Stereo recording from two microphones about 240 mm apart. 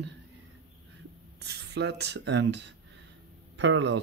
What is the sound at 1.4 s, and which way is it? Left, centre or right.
Speech, right.